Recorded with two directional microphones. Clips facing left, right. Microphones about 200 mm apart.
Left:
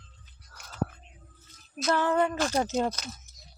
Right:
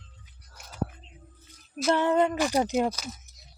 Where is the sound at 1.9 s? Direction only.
20° right (ahead or behind).